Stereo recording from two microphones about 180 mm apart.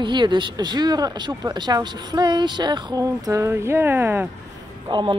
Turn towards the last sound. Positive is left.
turn(degrees=-25)  # may be behind; listen again after turning